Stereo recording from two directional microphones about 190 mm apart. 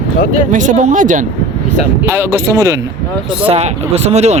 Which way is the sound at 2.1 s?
15° right (ahead or behind).